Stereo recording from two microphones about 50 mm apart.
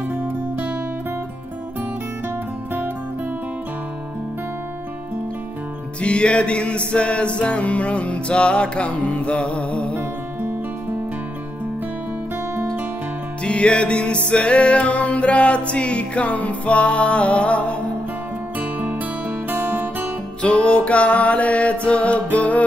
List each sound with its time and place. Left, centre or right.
1.8 s music: right
5.9 s music: left
13.4 s music: left
18.6 s music: right
20.4 s music: left